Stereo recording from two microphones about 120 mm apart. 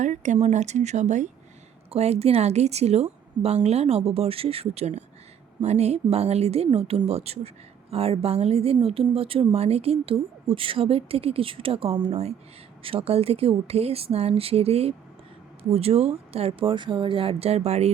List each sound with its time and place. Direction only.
0.0 s speech: 90° right
0.3 s speech: 70° right (ahead or behind)
1.9 s a woman's voice: 60° right (ahead or behind)